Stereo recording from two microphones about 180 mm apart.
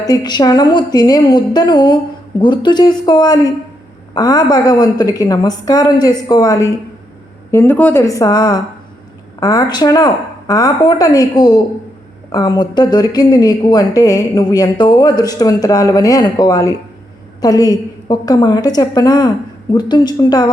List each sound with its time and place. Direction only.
0.0 s a woman's voice: 20° left (ahead or behind)